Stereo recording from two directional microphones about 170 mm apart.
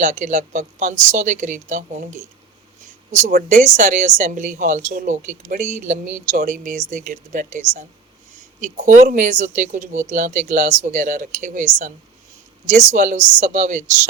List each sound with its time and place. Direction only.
0.0 s speech: 45° right (ahead or behind)
3.2 s speech: 50° right (ahead or behind)